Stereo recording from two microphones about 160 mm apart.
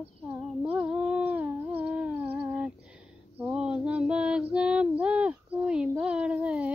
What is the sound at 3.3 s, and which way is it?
Female singing, 10° right (ahead or behind).